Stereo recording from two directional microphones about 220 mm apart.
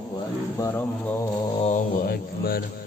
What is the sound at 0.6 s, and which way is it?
Speech, 10° left (ahead or behind).